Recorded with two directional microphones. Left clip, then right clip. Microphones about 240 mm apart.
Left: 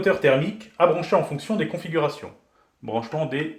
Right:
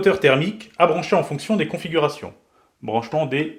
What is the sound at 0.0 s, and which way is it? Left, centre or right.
Speech, right.